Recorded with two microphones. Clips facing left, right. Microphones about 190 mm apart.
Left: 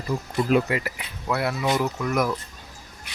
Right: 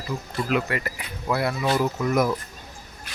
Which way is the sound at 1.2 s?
Centre (ahead or behind).